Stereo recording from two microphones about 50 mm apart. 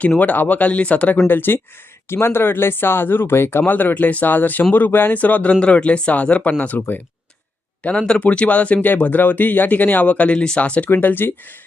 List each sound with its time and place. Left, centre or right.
0.2 s speech: left
1.3 s speech: left
2.0 s speech: left
3.7 s speech: left
5.1 s speech: left
6.7 s speech: left
7.9 s speech: centre
10.8 s speech: left